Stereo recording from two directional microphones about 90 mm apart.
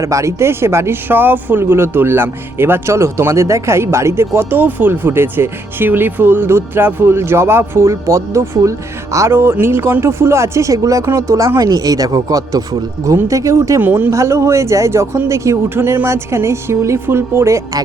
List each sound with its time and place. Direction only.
0.0 s speech: 35° right (ahead or behind)
13.8 s speech: 20° right (ahead or behind)
14.1 s speech: 30° right (ahead or behind)